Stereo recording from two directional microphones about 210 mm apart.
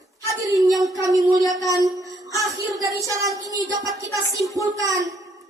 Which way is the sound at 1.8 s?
15° right (ahead or behind).